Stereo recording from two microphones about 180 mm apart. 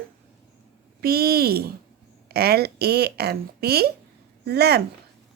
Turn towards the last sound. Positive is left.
turn(degrees=-65)  # may be behind; listen again after turning